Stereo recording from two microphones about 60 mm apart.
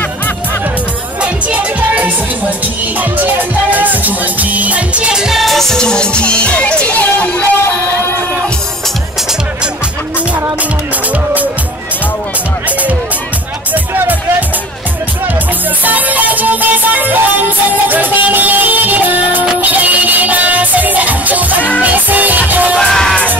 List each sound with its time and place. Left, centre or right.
1.2 s music: right
3.7 s music: right
5.1 s music: centre; by 7.4 s left
15.8 s music: right
22.8 s music: centre